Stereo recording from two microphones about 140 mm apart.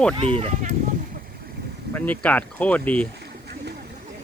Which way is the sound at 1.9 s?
10° left (ahead or behind).